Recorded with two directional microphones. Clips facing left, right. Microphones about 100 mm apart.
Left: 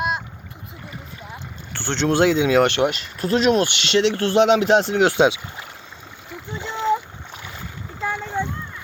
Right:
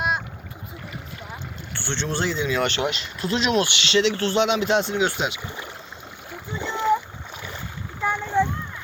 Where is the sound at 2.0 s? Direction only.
90° left; by 5.1 s 60° left (ahead or behind).